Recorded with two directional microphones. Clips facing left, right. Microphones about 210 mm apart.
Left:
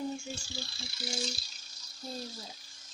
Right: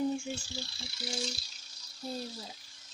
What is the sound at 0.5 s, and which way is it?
Speech, 90° left.